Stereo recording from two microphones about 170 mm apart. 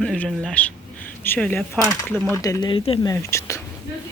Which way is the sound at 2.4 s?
20° left (ahead or behind).